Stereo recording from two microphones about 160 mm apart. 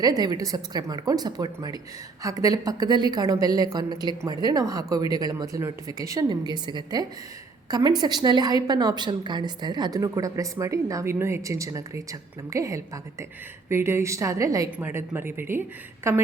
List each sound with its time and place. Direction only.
0.0 s a woman's voice: 25° right (ahead or behind)